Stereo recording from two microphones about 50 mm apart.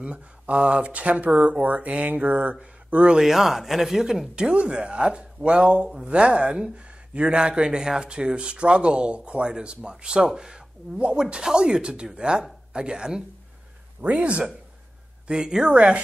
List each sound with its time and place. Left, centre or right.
0.0 s speech: right
3.2 s speech: centre
4.4 s speech: centre
11.0 s speech: right